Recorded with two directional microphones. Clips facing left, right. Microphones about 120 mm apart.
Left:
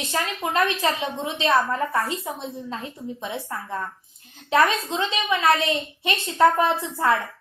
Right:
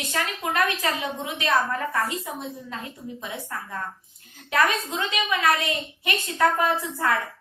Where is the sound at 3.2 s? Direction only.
30° left (ahead or behind).